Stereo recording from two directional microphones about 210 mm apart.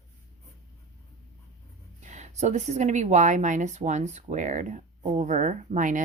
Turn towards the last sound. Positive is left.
turn(degrees=-40)  # may be behind; listen again after turning